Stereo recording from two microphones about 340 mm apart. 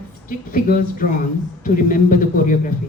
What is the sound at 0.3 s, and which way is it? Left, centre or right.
Speech, left.